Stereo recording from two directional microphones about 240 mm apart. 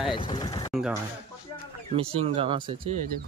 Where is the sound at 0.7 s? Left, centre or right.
Centre.